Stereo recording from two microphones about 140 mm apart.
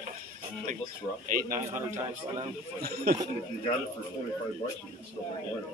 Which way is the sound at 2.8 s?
90° right.